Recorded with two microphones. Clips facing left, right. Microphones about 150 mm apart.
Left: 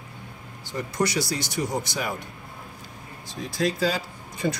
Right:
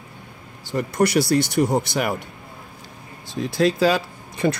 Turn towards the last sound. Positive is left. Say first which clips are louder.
# right 5 dB
turn(degrees=-70)  # may be behind; listen again after turning